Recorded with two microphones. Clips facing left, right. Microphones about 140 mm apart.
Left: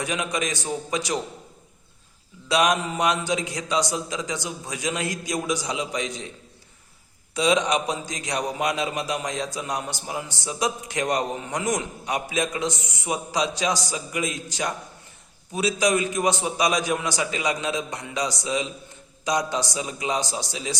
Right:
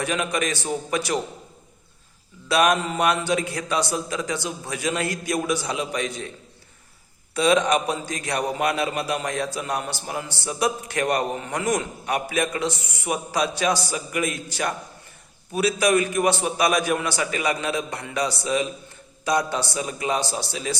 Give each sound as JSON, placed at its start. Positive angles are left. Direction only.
{"t": 0.0, "sound": "a man's voice", "side_deg": 15}
{"t": 2.5, "sound": "a man's voice", "side_deg": 15}
{"t": 7.3, "sound": "a man's voice", "side_deg": 15}